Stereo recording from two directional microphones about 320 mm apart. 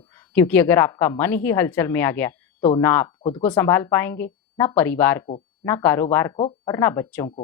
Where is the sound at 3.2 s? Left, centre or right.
Centre.